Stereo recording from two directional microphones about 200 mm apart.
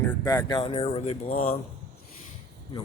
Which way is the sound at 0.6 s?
25° left (ahead or behind).